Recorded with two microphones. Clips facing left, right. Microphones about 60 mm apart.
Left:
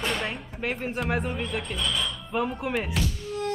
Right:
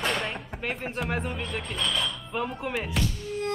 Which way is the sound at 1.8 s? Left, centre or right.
Right.